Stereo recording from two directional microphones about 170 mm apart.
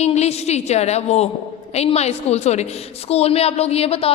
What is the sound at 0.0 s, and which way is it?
A woman's voice, 40° left (ahead or behind).